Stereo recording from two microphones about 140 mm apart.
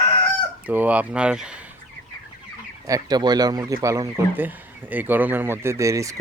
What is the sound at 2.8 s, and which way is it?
Speech, 25° right (ahead or behind).